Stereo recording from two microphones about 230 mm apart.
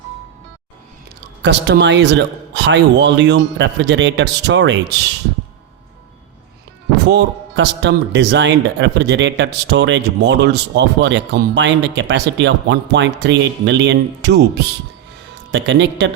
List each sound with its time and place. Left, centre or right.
1.4 s speech: right
7.1 s speech: right